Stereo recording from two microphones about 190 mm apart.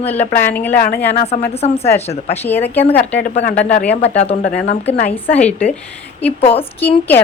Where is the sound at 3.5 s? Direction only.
45° left (ahead or behind).